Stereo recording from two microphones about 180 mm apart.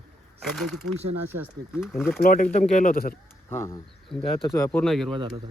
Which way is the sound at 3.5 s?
15° left (ahead or behind).